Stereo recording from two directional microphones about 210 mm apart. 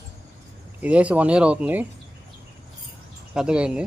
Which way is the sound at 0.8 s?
5° right (ahead or behind).